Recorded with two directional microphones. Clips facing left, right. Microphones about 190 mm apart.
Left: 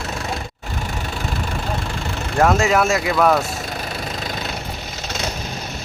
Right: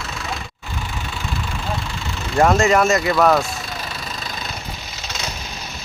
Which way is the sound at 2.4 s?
5° left (ahead or behind).